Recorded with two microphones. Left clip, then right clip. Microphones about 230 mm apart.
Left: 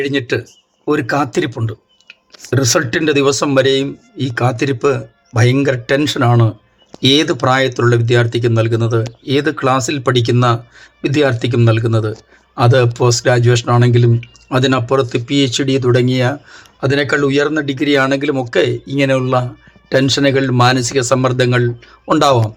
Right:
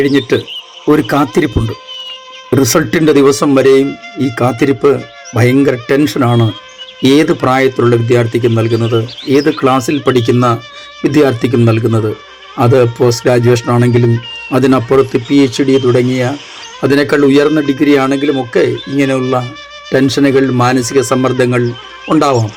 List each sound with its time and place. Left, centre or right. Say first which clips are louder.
0.0 s speech: right 6 dB; centre
2.5 s speech: right 4 dB; centre
16.8 s speech: right 5 dB; centre